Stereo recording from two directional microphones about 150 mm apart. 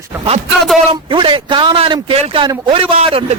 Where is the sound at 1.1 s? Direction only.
35° right (ahead or behind).